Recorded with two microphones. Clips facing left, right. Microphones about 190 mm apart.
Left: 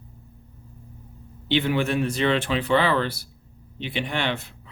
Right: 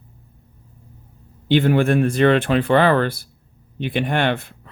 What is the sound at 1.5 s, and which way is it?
Speech, 50° right (ahead or behind).